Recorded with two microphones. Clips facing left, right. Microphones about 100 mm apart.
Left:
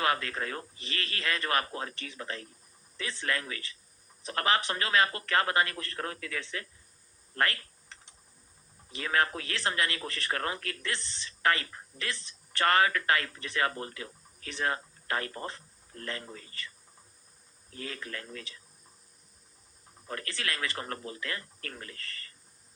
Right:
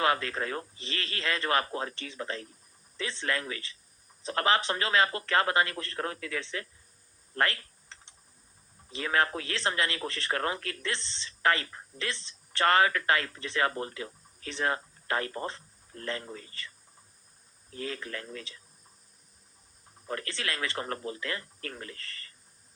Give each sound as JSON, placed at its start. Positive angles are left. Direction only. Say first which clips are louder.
{"t": 0.0, "sound": "speech", "louder": "right 2 dB", "side_deg": -25}
{"t": 7.3, "sound": "typing", "louder": "right 1 dB", "side_deg": -25}
{"t": 8.9, "sound": "speech", "louder": "right 1 dB", "side_deg": -25}
{"t": 17.7, "sound": "speech", "louder": "right 3 dB", "side_deg": -25}
{"t": 20.1, "sound": "speech", "louder": "right 2 dB", "side_deg": -25}